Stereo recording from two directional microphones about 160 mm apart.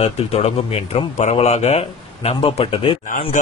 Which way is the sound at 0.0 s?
40° left (ahead or behind).